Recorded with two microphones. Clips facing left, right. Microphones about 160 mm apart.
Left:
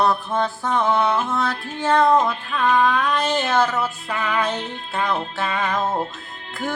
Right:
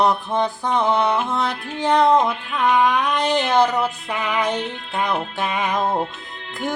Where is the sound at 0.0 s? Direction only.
15° right (ahead or behind).